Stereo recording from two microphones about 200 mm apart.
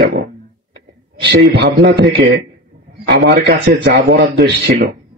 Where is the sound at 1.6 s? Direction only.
55° right (ahead or behind).